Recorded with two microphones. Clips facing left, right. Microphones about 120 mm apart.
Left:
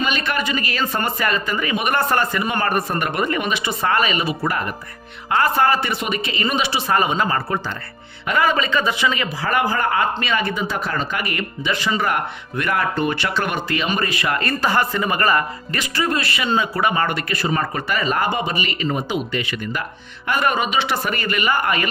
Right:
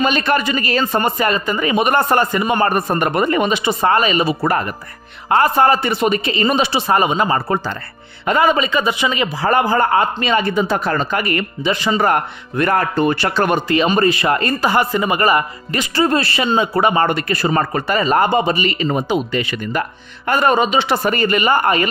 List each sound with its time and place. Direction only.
0.0 s speech: 40° right (ahead or behind)
0.9 s speech: 25° right (ahead or behind)
5.4 s speech: 25° right (ahead or behind)
7.0 s speech: 20° right (ahead or behind); by 11.4 s 40° right (ahead or behind)
11.6 s speech: 25° right (ahead or behind)
14.6 s speech: 15° right (ahead or behind); by 21.8 s 30° right (ahead or behind)